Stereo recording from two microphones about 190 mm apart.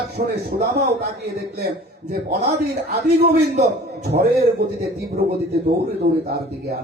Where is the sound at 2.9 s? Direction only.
60° right (ahead or behind).